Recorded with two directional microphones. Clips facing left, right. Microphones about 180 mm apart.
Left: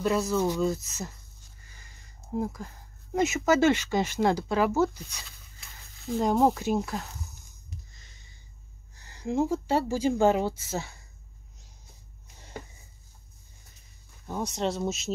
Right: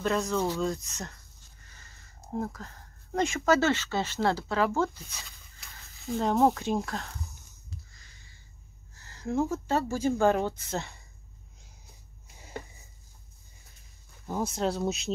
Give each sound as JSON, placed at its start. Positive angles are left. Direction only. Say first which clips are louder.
{"t": 0.0, "sound": "speech", "louder": "left 2 dB", "side_deg": 5}
{"t": 2.4, "sound": "speech", "louder": "left 3 dB", "side_deg": 10}
{"t": 5.1, "sound": "a sound", "louder": "even", "side_deg": 0}
{"t": 6.1, "sound": "speech", "louder": "left 1 dB", "side_deg": 10}
{"t": 7.9, "sound": "a sound", "louder": "left 1 dB", "side_deg": 20}
{"t": 9.0, "sound": "speech", "louder": "left 2 dB", "side_deg": 15}
{"t": 14.2, "sound": "speech", "louder": "even", "side_deg": -5}